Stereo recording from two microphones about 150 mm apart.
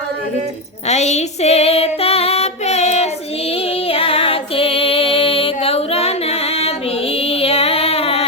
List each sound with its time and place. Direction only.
0.9 s female singing: 50° left (ahead or behind)
3.8 s music: 40° left (ahead or behind)